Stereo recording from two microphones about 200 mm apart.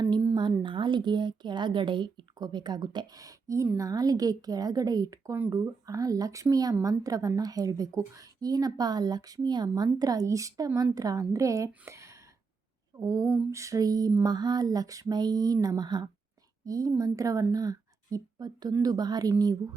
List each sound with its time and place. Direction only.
0.0 s a woman's voice: 20° right (ahead or behind)